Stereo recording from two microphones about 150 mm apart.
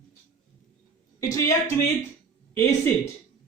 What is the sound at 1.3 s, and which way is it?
Speech, 20° left (ahead or behind).